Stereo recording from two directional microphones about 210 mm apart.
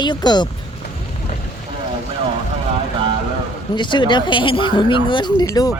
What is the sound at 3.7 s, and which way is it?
Speech, 20° left (ahead or behind).